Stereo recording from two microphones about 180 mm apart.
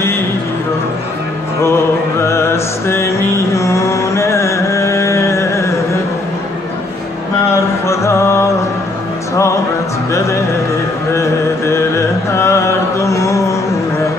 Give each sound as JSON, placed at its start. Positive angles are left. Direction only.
{"t": 2.2, "sound": "music", "side_deg": 15}
{"t": 7.8, "sound": "music", "side_deg": 15}
{"t": 11.1, "sound": "music", "side_deg": 15}